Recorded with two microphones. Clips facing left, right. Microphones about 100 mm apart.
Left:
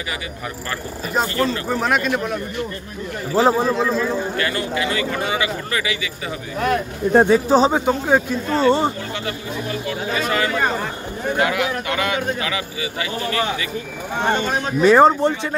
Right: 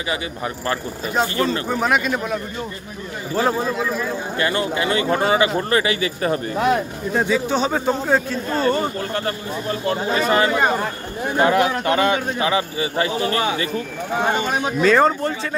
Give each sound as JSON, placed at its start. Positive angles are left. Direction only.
{"t": 1.7, "sound": "speech", "side_deg": 0}
{"t": 3.3, "sound": "speech", "side_deg": 20}
{"t": 3.6, "sound": "speech", "side_deg": 0}
{"t": 4.4, "sound": "speech", "side_deg": -25}
{"t": 7.1, "sound": "speech", "side_deg": 50}
{"t": 7.7, "sound": "speech", "side_deg": 15}
{"t": 8.5, "sound": "speech", "side_deg": 25}
{"t": 9.1, "sound": "speech", "side_deg": -40}
{"t": 10.0, "sound": "a man's voice", "side_deg": -30}
{"t": 11.3, "sound": "speech", "side_deg": -35}
{"t": 14.1, "sound": "speech", "side_deg": -5}
{"t": 14.8, "sound": "speech", "side_deg": 20}